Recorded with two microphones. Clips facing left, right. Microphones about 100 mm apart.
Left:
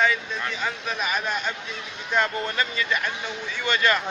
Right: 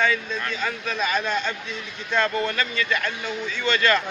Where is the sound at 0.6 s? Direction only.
15° left (ahead or behind).